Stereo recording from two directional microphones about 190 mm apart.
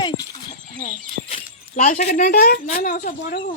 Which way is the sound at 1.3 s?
40° left (ahead or behind).